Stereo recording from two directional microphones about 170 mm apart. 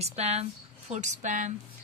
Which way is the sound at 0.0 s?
40° right (ahead or behind).